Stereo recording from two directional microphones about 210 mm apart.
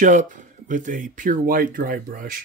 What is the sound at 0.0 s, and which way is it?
Speech, 40° right (ahead or behind).